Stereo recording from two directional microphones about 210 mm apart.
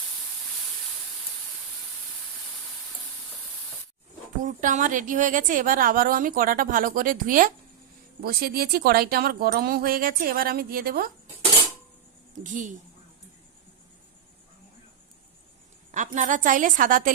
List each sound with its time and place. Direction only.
4.4 s a woman's voice: 35° right (ahead or behind)
12.4 s a woman's voice: 35° right (ahead or behind)
15.9 s a woman's voice: 35° right (ahead or behind)